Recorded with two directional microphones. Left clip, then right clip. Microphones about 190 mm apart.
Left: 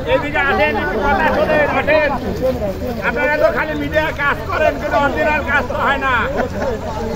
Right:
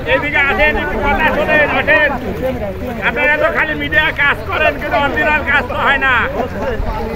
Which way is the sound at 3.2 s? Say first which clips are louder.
Right 2 dB; 10° right (ahead or behind).